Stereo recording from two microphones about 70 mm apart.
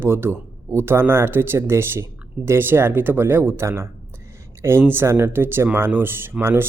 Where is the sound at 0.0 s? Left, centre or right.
Right.